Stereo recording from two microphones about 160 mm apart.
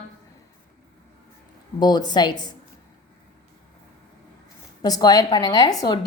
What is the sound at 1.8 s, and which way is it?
Speech, 25° left (ahead or behind).